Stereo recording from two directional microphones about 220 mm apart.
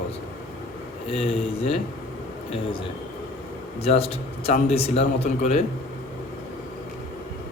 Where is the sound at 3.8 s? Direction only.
25° left (ahead or behind).